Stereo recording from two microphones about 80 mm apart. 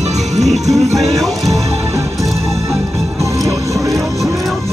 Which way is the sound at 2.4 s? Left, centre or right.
Right.